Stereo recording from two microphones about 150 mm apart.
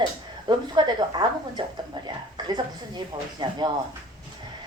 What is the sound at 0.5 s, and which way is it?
A woman's voice, 30° right (ahead or behind).